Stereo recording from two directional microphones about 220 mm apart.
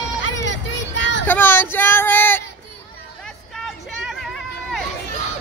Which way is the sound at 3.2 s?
Centre (ahead or behind).